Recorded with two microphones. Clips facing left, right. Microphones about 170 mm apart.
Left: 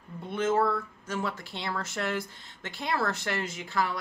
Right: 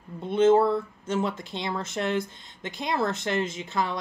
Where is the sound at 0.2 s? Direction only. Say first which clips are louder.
Right 7 dB; 25° right (ahead or behind).